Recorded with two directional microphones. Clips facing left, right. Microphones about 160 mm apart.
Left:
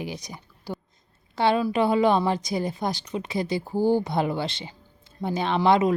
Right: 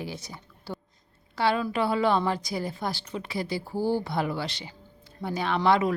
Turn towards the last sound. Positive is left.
turn(degrees=20)  # may be behind; listen again after turning